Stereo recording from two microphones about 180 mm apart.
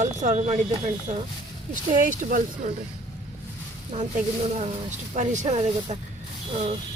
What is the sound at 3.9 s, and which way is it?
Speech, 40° right (ahead or behind).